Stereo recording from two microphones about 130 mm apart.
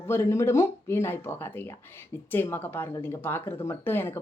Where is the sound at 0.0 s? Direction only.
20° left (ahead or behind).